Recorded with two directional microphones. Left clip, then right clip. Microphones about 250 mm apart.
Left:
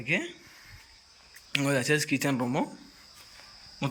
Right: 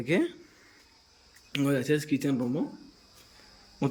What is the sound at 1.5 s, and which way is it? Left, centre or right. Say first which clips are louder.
Speech: left 1 dB; centre.